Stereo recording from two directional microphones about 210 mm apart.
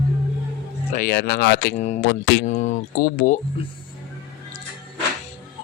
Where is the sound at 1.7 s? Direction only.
35° left (ahead or behind).